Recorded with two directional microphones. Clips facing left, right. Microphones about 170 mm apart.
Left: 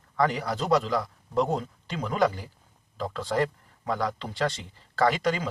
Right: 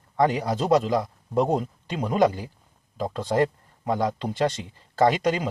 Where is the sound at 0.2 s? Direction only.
20° right (ahead or behind).